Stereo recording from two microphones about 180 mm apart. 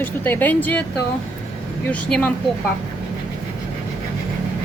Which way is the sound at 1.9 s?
5° left (ahead or behind).